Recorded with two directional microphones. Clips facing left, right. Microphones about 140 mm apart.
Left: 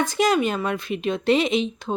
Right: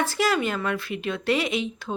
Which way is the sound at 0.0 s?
20° left (ahead or behind).